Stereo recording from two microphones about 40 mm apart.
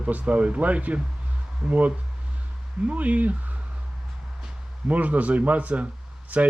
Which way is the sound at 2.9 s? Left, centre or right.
Right.